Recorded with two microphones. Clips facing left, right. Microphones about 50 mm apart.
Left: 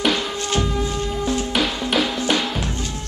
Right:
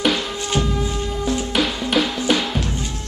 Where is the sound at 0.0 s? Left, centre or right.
Centre.